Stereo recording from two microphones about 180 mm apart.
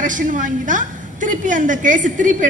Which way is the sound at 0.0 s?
45° right (ahead or behind).